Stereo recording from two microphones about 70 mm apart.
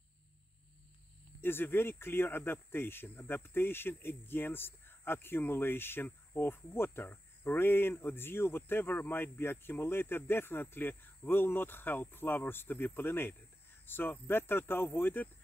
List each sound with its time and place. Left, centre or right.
1.4 s speech: left